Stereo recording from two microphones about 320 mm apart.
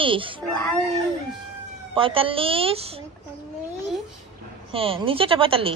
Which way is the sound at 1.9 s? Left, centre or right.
Centre.